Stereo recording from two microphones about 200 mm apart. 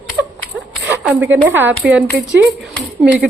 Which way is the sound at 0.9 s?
10° right (ahead or behind).